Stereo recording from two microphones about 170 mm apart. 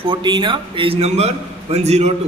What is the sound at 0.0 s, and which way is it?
Speech, 30° right (ahead or behind).